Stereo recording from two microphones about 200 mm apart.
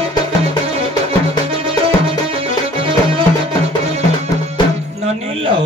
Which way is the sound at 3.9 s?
35° right (ahead or behind).